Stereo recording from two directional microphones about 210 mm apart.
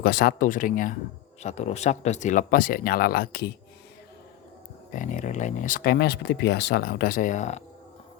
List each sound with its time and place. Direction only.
0.0 s speech: 45° left (ahead or behind)
4.9 s speech: 35° left (ahead or behind)